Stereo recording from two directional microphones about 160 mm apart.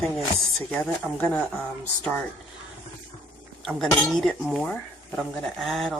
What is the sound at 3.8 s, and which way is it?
Speech, 5° left (ahead or behind).